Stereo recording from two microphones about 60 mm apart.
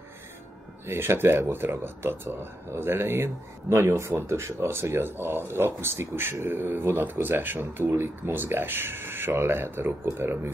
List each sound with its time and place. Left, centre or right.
0.8 s speech: right
3.6 s speech: right